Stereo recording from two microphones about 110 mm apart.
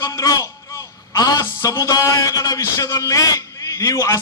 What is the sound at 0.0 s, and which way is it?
A man's voice, 30° left (ahead or behind).